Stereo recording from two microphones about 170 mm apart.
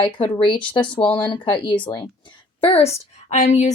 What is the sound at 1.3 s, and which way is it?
A woman's voice, 30° left (ahead or behind).